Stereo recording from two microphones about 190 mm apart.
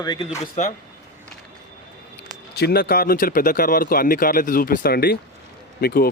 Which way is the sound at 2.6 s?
55° left (ahead or behind).